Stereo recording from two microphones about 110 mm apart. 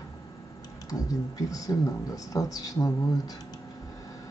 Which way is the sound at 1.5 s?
30° left (ahead or behind).